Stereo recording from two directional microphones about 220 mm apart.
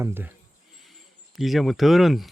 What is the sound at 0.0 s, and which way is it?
Speech, 10° right (ahead or behind).